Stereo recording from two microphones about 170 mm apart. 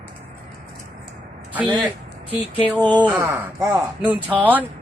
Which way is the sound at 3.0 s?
10° right (ahead or behind).